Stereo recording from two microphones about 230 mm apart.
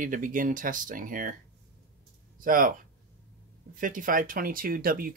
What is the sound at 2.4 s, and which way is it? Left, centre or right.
Speech, right.